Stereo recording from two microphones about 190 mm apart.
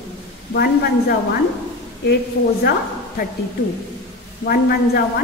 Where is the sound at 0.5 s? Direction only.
55° left (ahead or behind).